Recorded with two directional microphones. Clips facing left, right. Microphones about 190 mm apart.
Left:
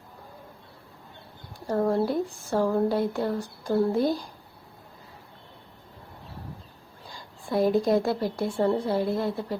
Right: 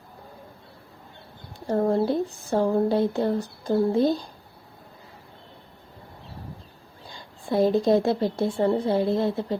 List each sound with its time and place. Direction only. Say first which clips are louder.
1.5 s speech: right 2 dB; 25° right (ahead or behind)
7.1 s speech: right 2 dB; 25° right (ahead or behind)